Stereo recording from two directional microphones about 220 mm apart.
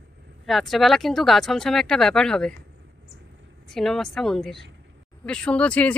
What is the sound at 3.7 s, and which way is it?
Speech, centre (ahead or behind).